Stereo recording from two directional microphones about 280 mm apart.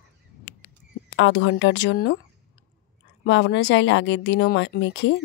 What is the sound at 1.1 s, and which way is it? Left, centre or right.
Speech, left.